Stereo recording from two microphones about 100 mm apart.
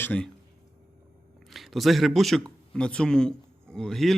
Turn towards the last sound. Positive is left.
turn(degrees=5)  # may be behind; listen again after turning